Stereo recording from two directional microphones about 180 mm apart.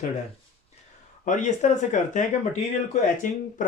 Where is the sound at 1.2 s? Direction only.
40° left (ahead or behind).